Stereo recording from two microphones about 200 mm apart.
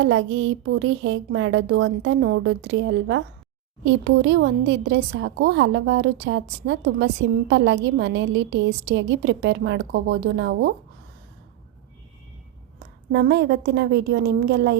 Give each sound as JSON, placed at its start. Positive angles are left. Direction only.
{"t": 0.0, "sound": "speech", "side_deg": -85}
{"t": 3.8, "sound": "speech", "side_deg": -65}
{"t": 13.1, "sound": "speech", "side_deg": -55}